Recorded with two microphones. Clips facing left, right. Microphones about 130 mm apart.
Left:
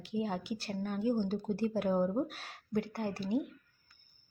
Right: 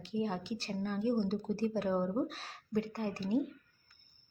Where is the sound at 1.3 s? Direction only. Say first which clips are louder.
Left 1 dB; 15° left (ahead or behind).